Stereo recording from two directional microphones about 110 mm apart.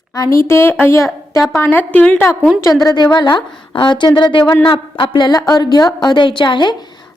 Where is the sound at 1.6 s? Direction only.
15° left (ahead or behind).